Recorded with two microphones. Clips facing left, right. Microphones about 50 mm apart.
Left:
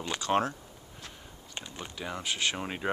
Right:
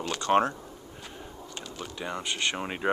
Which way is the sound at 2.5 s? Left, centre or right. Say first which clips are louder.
Right 4 dB; centre.